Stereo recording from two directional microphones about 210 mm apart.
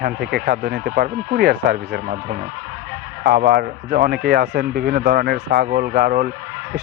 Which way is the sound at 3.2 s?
50° right (ahead or behind).